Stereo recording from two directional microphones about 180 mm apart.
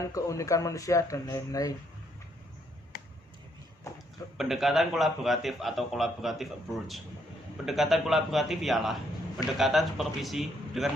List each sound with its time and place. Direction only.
0.0 s speech: 15° left (ahead or behind)
4.4 s a man's voice: centre (ahead or behind)